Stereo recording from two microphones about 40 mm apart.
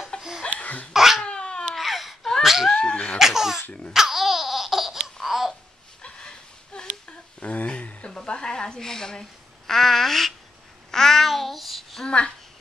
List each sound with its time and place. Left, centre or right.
0.1 s laughter: left
0.5 s laughter: left
0.9 s babbling: centre
1.2 s cat: left
1.8 s baby cry: centre
2.4 s a sound: centre
2.7 s speech: left
3.2 s baby laughter: centre
3.9 s laughter: centre
5.2 s babbling: centre
6.0 s a sound: left
7.3 s speech: left
8.3 s a woman's voice: centre
10.9 s babbling: centre